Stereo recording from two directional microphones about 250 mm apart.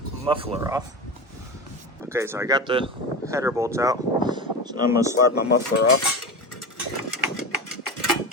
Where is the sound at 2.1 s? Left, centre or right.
Centre.